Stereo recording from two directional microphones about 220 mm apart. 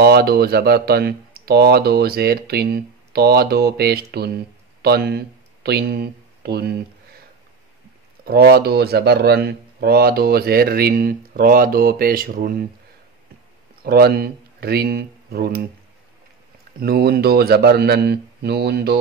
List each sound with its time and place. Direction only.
0.0 s speech: 45° right (ahead or behind)
8.3 s speech: 45° right (ahead or behind)
13.8 s speech: 45° right (ahead or behind)
16.8 s speech: 45° right (ahead or behind)